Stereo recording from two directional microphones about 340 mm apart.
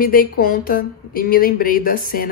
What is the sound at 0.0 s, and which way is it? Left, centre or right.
Speech, left.